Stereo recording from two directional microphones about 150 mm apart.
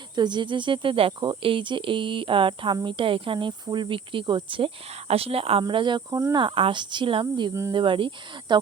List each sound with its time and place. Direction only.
0.2 s speech: 30° right (ahead or behind)